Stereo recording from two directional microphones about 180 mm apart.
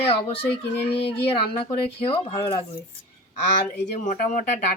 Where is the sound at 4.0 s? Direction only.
45° left (ahead or behind).